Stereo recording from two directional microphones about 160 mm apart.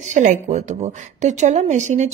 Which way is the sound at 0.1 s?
50° right (ahead or behind).